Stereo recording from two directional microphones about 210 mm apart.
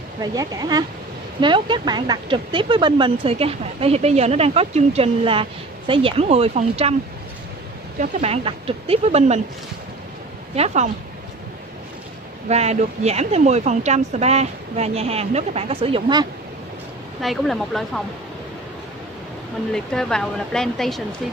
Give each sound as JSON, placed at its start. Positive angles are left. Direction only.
{"t": 0.2, "sound": "speech", "side_deg": -15}
{"t": 8.0, "sound": "speech", "side_deg": -30}
{"t": 10.5, "sound": "speech", "side_deg": -30}
{"t": 12.4, "sound": "speech", "side_deg": -30}
{"t": 17.2, "sound": "speech", "side_deg": 0}
{"t": 19.7, "sound": "speech", "side_deg": 5}